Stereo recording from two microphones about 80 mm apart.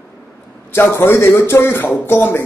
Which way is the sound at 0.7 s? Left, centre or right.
Left.